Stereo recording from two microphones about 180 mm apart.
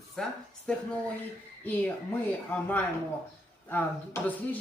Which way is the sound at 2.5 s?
10° left (ahead or behind).